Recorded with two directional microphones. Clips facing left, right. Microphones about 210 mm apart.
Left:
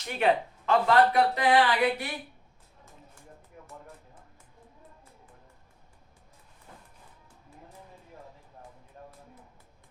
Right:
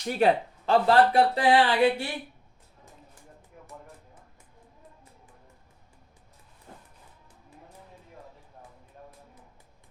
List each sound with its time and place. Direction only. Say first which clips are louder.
0.1 s speech: right 3 dB; 35° right (ahead or behind)